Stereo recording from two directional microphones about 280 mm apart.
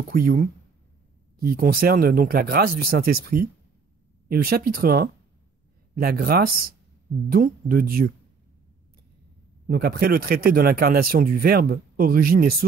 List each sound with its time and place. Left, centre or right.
0.1 s speech: right
9.7 s speech: right